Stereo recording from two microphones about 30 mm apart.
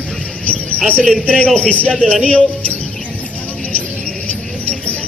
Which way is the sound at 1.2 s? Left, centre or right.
Left.